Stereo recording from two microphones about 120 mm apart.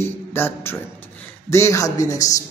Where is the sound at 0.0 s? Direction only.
20° left (ahead or behind).